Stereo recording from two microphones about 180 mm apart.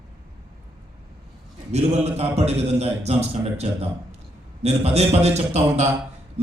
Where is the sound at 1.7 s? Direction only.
35° right (ahead or behind).